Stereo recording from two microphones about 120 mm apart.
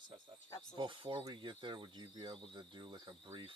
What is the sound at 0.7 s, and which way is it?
Speech, 40° right (ahead or behind).